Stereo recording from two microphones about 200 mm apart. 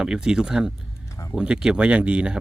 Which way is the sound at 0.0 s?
5° right (ahead or behind).